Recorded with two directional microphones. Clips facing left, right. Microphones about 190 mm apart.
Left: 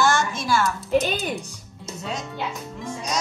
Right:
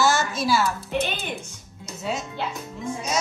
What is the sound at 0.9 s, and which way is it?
Speech, 40° left (ahead or behind).